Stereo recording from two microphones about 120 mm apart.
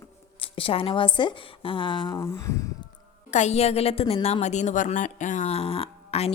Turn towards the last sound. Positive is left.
turn(degrees=55)  # may be behind; listen again after turning